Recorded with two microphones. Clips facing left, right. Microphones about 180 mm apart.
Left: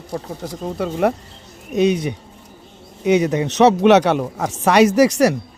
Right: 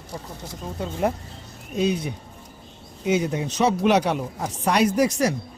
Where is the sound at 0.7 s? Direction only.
70° left (ahead or behind).